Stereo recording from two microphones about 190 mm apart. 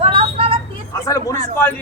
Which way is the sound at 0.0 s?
30° right (ahead or behind).